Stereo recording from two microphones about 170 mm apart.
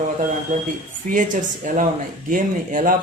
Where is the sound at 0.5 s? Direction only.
50° right (ahead or behind).